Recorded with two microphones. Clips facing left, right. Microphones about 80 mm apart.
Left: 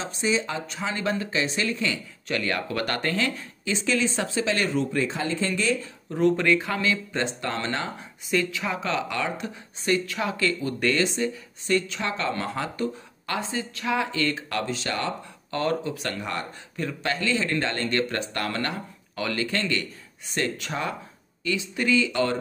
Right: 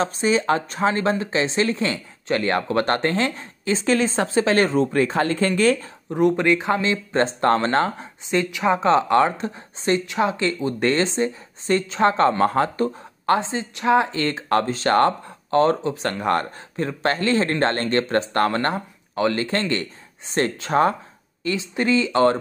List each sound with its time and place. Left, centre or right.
0.0 s speech: right
1.2 s speech: right
4.9 s speech: right
6.0 s speech: centre
7.2 s speech: right
13.4 s speech: right
15.5 s speech: right
16.2 s speech: right
16.7 s speech: right